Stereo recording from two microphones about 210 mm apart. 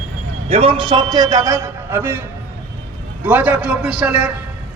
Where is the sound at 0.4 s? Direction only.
25° right (ahead or behind); by 2.2 s 10° right (ahead or behind).